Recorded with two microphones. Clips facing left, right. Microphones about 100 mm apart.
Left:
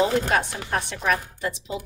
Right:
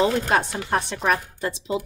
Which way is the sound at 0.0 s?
30° right (ahead or behind).